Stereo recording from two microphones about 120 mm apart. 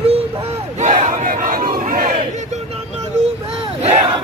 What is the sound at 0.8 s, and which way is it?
Crowd, 85° right.